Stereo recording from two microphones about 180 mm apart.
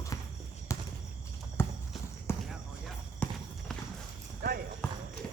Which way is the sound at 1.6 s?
15° left (ahead or behind).